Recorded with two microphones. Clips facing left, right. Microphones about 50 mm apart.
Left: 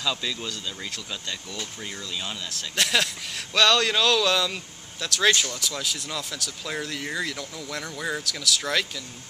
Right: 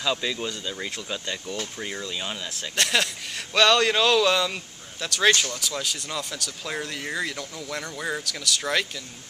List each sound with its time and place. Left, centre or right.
0.0 s speech: centre
2.7 s speech: centre